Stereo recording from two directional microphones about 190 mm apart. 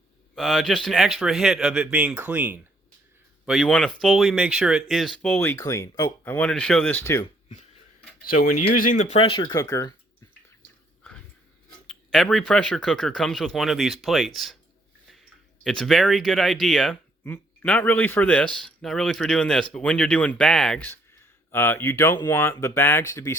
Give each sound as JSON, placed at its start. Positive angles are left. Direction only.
{"t": 0.3, "sound": "speech", "side_deg": 0}
{"t": 6.2, "sound": "speech", "side_deg": 5}
{"t": 8.2, "sound": "speech", "side_deg": 50}
{"t": 11.9, "sound": "speech", "side_deg": 0}
{"t": 15.6, "sound": "speech", "side_deg": 5}